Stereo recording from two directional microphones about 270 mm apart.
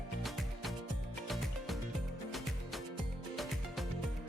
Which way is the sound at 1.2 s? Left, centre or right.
Centre.